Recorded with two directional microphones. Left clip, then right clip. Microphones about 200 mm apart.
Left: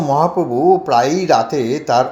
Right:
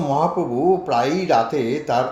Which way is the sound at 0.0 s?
40° left (ahead or behind).